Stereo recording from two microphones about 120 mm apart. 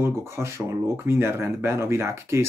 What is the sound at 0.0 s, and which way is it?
Speech, 20° right (ahead or behind).